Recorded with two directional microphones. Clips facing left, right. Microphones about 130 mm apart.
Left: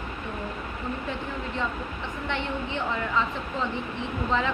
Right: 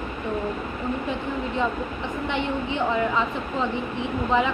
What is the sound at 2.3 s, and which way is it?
A woman's voice, 15° right (ahead or behind).